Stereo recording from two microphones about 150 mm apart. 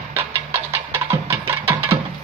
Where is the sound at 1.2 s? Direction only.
15° right (ahead or behind).